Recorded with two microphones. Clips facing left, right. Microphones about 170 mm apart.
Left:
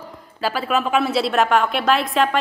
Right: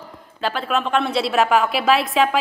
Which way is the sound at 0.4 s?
5° left (ahead or behind).